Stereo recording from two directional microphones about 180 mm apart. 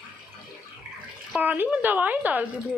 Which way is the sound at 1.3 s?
10° right (ahead or behind).